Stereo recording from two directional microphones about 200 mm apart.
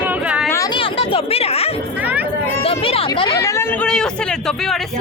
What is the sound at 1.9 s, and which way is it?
Speech, 10° right (ahead or behind).